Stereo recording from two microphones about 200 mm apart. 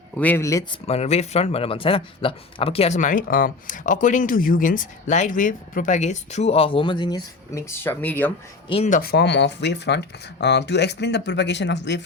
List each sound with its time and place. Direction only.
0.2 s speech: 10° left (ahead or behind)
0.9 s speech: 30° left (ahead or behind); by 8.3 s 10° left (ahead or behind)
8.7 s speech: 35° left (ahead or behind)
9.0 s speech: 50° left (ahead or behind)